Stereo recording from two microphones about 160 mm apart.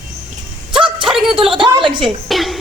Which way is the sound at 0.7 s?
30° right (ahead or behind).